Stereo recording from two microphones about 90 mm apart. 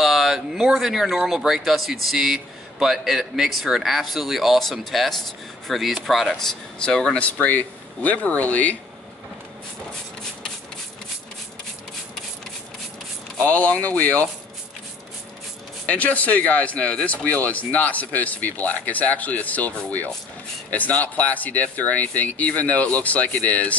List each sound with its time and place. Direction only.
0.0 s speech: centre (ahead or behind); by 8.7 s 15° left (ahead or behind)
13.4 s speech: 15° left (ahead or behind)
15.9 s speech: 15° left (ahead or behind)